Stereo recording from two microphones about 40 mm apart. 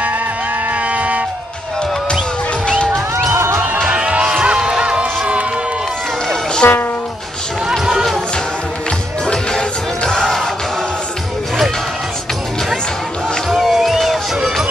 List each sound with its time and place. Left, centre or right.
0.8 s music: right
3.3 s music: right
3.8 s music: right
6.6 s speech: left
9.2 s music: centre
13.5 s music: centre